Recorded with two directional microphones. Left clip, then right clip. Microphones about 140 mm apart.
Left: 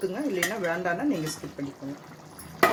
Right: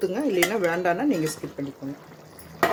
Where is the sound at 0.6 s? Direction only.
50° right (ahead or behind).